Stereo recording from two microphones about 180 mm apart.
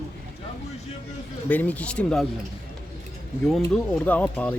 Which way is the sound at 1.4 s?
10° left (ahead or behind).